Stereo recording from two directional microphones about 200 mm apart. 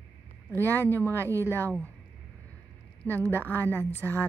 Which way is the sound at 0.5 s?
10° left (ahead or behind).